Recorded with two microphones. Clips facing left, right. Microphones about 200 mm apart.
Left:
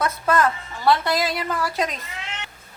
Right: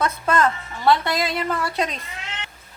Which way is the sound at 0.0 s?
5° left (ahead or behind).